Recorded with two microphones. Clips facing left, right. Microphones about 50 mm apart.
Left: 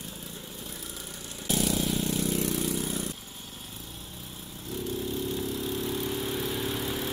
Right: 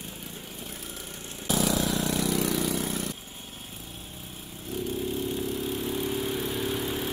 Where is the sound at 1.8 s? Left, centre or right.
Right.